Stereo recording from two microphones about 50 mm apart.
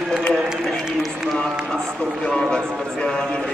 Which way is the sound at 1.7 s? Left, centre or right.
Centre.